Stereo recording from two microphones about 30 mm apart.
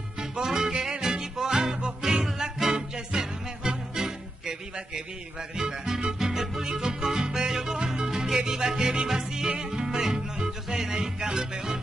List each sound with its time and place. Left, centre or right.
0.2 s music: right
5.6 s speech: centre
6.1 s music: centre
9.0 s speech: centre
9.5 s music: right